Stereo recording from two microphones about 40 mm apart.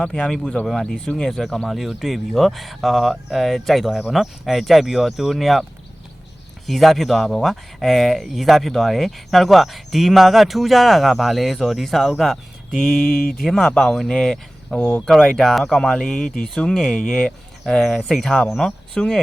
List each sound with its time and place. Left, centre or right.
0.0 s speech: centre
1.3 s speech: centre
6.7 s speech: centre